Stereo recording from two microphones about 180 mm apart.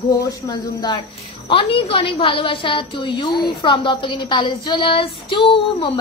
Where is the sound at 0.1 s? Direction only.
20° left (ahead or behind).